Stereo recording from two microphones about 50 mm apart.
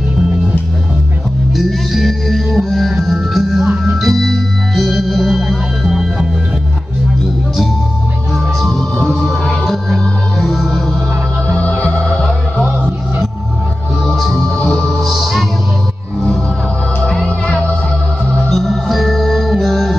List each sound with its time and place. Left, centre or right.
1.5 s music: centre
8.5 s music: centre
14.0 s music: centre
15.0 s music: centre
17.0 s music: centre
18.5 s music: centre